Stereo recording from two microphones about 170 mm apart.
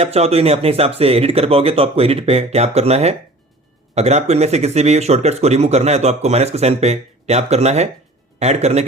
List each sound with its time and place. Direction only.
0.0 s speech: 35° right (ahead or behind)